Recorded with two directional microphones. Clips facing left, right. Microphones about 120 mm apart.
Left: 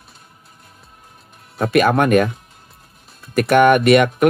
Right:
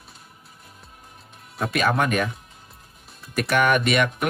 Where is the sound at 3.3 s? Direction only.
55° left (ahead or behind).